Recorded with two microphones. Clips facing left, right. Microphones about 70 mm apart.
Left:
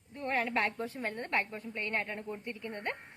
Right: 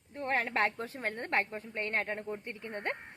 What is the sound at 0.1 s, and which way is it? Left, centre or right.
A woman's voice, right.